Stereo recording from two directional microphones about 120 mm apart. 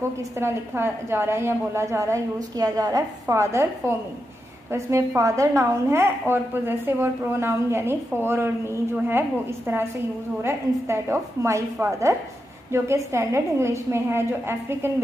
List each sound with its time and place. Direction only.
0.4 s a woman's voice: 20° right (ahead or behind)